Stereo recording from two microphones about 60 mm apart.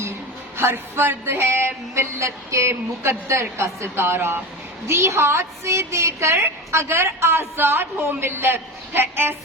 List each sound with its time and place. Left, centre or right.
0.5 s a woman's voice: right